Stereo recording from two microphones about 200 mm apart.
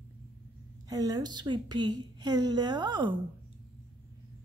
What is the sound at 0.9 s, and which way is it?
Speech, 20° right (ahead or behind).